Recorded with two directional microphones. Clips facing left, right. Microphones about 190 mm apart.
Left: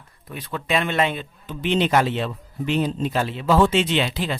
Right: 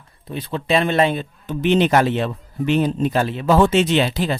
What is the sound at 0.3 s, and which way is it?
Speech, 25° right (ahead or behind).